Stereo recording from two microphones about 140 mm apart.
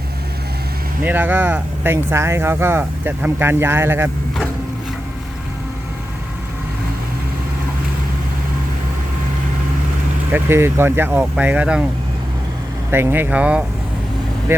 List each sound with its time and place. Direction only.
1.0 s speech: 15° right (ahead or behind)
10.3 s speech: 15° right (ahead or behind)
12.9 s speech: 15° right (ahead or behind)